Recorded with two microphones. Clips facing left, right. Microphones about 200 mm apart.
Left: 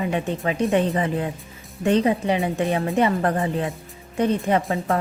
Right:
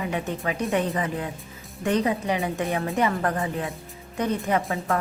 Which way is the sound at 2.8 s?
30° left (ahead or behind).